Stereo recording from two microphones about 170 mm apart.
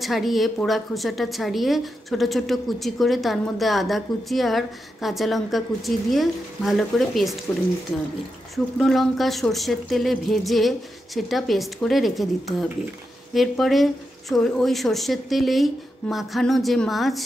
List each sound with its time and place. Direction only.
0.0 s a woman's voice: centre (ahead or behind)
8.7 s a woman's voice: centre (ahead or behind)